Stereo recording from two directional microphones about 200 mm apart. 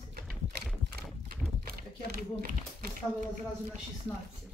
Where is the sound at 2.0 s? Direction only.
50° right (ahead or behind).